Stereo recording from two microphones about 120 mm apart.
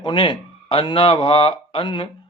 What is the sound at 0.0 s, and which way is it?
Speech, 40° left (ahead or behind).